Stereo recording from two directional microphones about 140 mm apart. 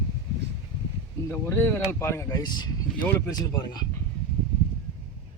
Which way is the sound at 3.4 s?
30° left (ahead or behind).